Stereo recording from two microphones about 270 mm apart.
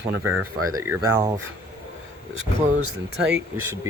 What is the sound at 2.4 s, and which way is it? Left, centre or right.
Speech, right.